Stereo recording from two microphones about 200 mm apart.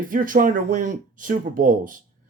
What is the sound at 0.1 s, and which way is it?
Speech, 40° right (ahead or behind).